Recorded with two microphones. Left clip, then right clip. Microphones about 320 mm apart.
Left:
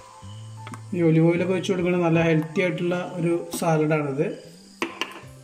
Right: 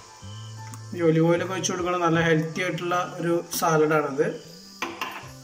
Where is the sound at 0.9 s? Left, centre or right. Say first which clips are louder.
Even; centre.